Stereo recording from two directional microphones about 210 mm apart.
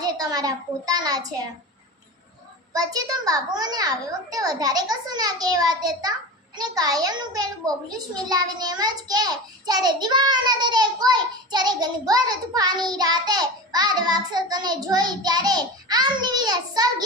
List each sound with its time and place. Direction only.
0.0 s a child's voice: 20° right (ahead or behind)
2.7 s a child's voice: 15° right (ahead or behind)